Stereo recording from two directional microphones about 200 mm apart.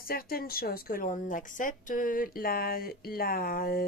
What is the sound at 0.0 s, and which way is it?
Speech, 50° left (ahead or behind).